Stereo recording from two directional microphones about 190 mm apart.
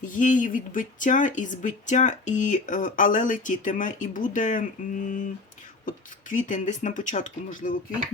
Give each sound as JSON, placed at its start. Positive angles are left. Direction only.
{"t": 0.0, "sound": "speech", "side_deg": 40}